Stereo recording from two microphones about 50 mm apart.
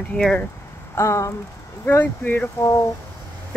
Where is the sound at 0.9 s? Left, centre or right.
Left.